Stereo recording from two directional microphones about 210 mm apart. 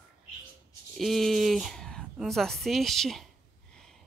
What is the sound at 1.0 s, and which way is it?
Speech, centre (ahead or behind).